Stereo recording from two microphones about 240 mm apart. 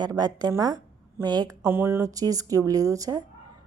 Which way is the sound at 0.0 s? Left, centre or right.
Centre.